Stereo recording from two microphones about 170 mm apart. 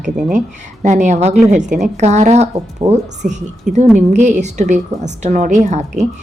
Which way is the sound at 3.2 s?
45° right (ahead or behind).